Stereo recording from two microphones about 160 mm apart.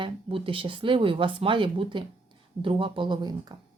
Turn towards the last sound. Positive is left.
turn(degrees=-25)  # may be behind; listen again after turning